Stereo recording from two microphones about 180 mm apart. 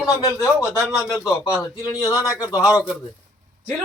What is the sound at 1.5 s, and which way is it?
Speech, 20° left (ahead or behind).